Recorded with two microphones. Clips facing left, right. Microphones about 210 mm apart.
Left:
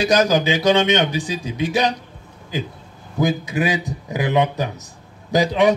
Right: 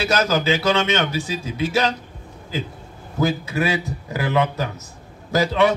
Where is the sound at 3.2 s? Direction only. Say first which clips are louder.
Left 1 dB; 15° left (ahead or behind).